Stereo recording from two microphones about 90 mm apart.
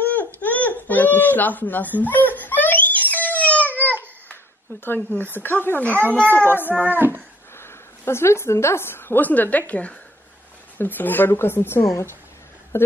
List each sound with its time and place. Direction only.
0.0 s baby cry: 15° left (ahead or behind)
4.3 s a sound: 20° left (ahead or behind)
5.3 s a woman's voice: 25° left (ahead or behind)